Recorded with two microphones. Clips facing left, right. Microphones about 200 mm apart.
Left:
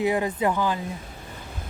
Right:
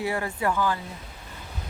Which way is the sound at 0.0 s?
20° left (ahead or behind).